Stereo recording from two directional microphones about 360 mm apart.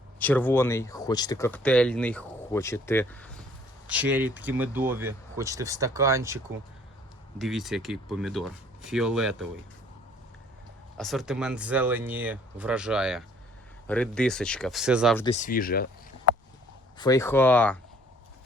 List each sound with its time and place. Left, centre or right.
0.2 s speech: centre
10.9 s speech: centre
15.2 s speech: centre
17.0 s speech: centre